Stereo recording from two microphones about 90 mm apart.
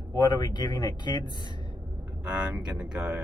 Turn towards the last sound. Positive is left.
turn(degrees=-10)  # may be behind; listen again after turning